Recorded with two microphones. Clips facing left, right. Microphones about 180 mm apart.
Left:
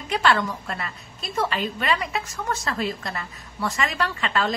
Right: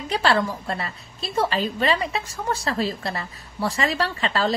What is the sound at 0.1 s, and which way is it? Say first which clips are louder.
A woman's voice: right 1 dB; 30° right (ahead or behind).